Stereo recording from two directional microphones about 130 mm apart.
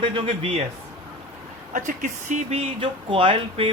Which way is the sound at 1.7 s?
85° right.